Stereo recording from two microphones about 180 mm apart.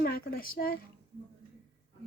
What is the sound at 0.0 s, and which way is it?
Speech, 55° left (ahead or behind).